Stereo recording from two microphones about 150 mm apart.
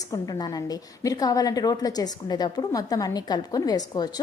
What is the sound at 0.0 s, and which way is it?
A woman's voice, 25° left (ahead or behind).